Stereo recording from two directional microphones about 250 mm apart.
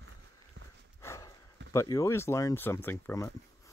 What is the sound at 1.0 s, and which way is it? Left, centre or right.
Horse, centre.